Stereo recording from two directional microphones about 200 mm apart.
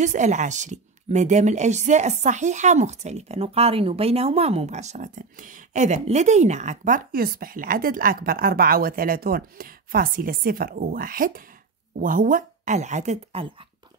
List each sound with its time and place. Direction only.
0.0 s a woman's voice: 35° right (ahead or behind)